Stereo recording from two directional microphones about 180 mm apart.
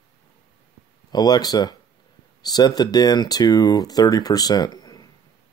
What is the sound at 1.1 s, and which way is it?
Speech, 20° left (ahead or behind).